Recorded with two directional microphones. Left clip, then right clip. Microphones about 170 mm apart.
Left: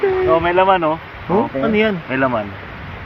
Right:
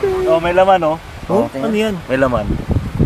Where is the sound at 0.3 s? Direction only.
90° right.